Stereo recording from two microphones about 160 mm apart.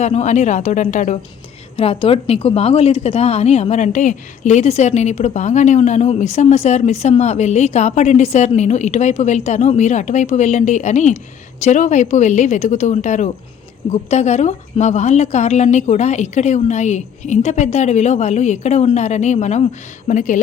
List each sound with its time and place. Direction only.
0.0 s a woman's voice: 45° left (ahead or behind)
1.7 s a woman's voice: 35° left (ahead or behind)